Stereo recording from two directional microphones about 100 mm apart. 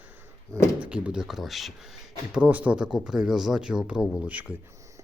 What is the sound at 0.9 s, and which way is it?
Speech, 10° right (ahead or behind).